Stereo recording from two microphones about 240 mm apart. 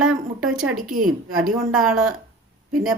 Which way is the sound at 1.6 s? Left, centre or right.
Centre.